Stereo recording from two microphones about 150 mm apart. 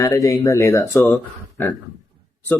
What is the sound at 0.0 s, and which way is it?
Speech, 20° left (ahead or behind).